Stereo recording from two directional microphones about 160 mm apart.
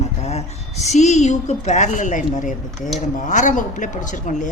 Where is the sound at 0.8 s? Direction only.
45° left (ahead or behind).